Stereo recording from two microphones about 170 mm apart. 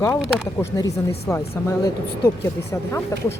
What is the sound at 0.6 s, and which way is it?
Speech, 15° left (ahead or behind).